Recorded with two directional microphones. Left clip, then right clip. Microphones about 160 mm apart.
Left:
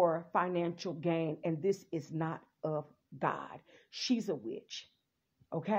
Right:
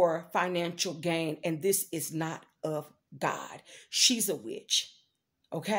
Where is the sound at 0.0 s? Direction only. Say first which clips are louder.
Right 3 dB; 25° right (ahead or behind).